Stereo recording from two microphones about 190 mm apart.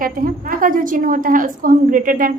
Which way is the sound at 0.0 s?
45° right (ahead or behind).